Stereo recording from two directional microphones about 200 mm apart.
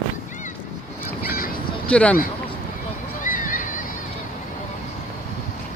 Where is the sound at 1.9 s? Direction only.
5° left (ahead or behind).